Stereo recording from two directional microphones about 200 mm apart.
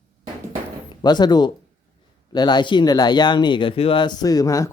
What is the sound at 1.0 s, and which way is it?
A man's voice, 20° left (ahead or behind).